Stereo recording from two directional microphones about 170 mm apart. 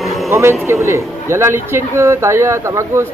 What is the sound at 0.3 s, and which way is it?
Speech, 15° right (ahead or behind).